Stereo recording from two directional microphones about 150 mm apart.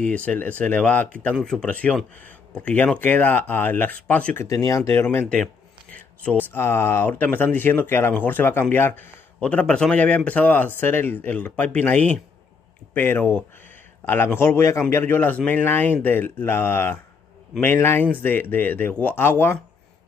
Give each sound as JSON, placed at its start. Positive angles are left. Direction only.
{"t": 0.1, "sound": "speech", "side_deg": 10}
{"t": 4.5, "sound": "speech", "side_deg": 20}
{"t": 5.3, "sound": "a sound", "side_deg": 5}
{"t": 6.2, "sound": "speech", "side_deg": 15}